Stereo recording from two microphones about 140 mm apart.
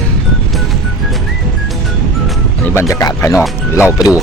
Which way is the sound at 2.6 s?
20° left (ahead or behind).